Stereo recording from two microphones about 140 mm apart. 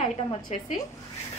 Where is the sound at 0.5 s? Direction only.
50° left (ahead or behind).